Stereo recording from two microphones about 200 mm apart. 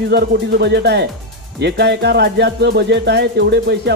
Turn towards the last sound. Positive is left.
turn(degrees=-55)  # may be behind; listen again after turning